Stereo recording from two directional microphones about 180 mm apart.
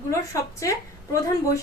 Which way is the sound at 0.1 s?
15° left (ahead or behind).